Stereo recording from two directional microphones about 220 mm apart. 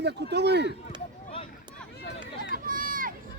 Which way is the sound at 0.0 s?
50° right (ahead or behind).